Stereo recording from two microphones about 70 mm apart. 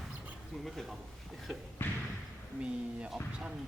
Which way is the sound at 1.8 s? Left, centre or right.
Left.